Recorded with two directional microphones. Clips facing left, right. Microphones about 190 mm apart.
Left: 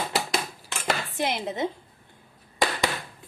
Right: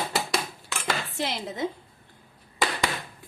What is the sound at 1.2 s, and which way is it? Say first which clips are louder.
Speech: left 3 dB; 20° left (ahead or behind).